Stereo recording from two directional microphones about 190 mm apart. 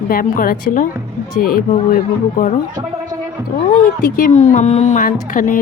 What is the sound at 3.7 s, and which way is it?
A woman's voice, 45° left (ahead or behind).